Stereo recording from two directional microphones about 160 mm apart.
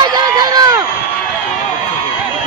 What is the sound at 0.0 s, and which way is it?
Run, 25° right (ahead or behind).